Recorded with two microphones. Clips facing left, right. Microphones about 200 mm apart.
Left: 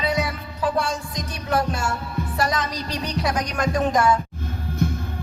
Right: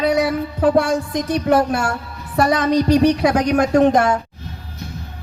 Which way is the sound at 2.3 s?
60° right (ahead or behind).